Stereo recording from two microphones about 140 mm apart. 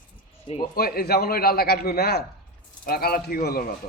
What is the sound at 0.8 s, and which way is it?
A man's voice, 90° left.